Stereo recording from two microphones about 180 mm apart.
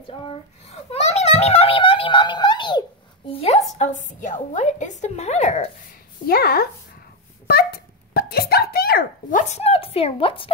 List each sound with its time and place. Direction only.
0.0 s a child's voice: 30° left (ahead or behind)
6.2 s a woman's voice: 60° left (ahead or behind)
7.4 s wail: 60° left (ahead or behind)
9.4 s a woman's voice: 35° left (ahead or behind)